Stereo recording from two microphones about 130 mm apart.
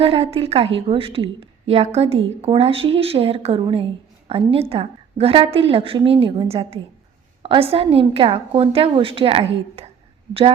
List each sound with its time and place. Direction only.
0.0 s a woman's voice: 50° right (ahead or behind)